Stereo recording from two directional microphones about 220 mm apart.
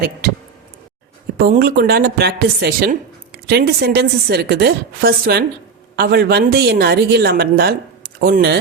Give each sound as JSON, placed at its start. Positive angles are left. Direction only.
{"t": 1.4, "sound": "a woman's voice", "side_deg": -40}